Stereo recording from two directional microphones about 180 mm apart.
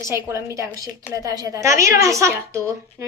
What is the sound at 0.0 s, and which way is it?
A woman's voice, 15° right (ahead or behind).